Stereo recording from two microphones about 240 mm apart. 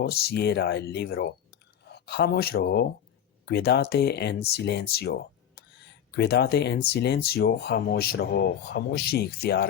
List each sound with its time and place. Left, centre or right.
0.0 s speech: left